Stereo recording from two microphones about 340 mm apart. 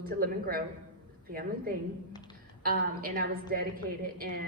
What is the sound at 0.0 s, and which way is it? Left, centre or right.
A woman's voice, right.